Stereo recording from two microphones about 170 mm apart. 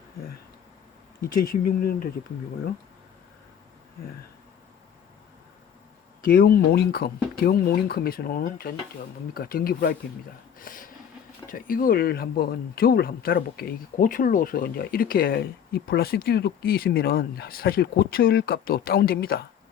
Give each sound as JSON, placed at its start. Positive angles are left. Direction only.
{"t": 1.2, "sound": "speech", "side_deg": 60}
{"t": 6.2, "sound": "speech", "side_deg": 60}